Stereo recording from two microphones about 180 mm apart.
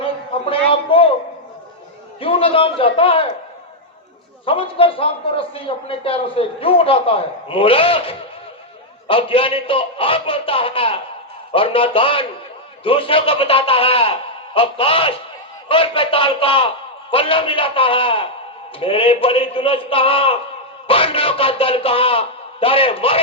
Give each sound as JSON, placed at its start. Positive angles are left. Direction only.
{"t": 0.7, "sound": "music", "side_deg": 30}
{"t": 2.2, "sound": "a man's voice", "side_deg": 30}
{"t": 4.4, "sound": "a man's voice", "side_deg": 30}